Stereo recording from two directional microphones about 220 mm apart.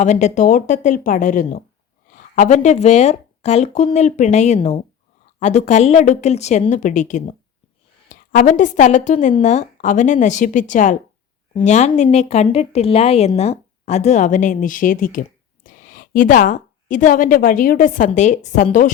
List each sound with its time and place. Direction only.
0.0 s a woman's voice: 30° left (ahead or behind)